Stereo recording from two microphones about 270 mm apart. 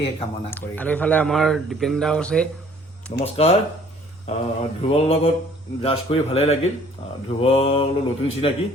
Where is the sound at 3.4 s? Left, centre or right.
Left.